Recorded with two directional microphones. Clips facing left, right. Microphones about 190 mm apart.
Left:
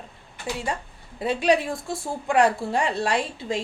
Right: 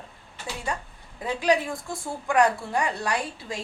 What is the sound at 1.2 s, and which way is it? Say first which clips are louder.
A woman's voice: left 3 dB; 25° left (ahead or behind).